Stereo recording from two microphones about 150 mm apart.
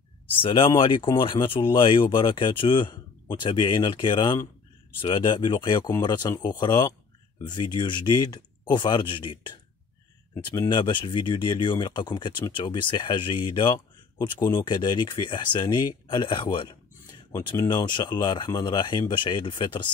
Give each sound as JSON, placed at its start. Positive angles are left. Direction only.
{"t": 0.4, "sound": "speech", "side_deg": 35}
{"t": 10.7, "sound": "speech", "side_deg": 30}